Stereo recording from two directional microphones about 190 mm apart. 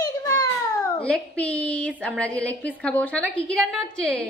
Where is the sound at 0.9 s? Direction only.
5° left (ahead or behind).